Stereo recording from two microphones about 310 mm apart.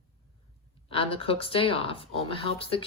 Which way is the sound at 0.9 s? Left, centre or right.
Centre.